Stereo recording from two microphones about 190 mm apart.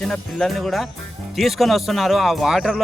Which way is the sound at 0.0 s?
5° left (ahead or behind).